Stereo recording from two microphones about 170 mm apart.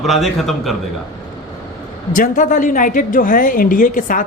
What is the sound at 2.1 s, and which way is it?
A woman's voice, 50° left (ahead or behind).